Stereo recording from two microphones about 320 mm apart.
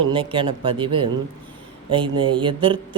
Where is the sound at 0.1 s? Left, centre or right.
Centre.